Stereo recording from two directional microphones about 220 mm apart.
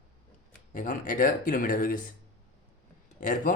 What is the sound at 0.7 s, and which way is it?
Speech, 35° left (ahead or behind).